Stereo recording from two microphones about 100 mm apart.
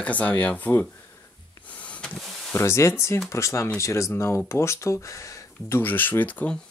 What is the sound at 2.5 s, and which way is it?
Speech, 25° left (ahead or behind).